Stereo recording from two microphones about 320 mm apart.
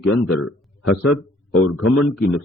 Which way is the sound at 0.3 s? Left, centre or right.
Left.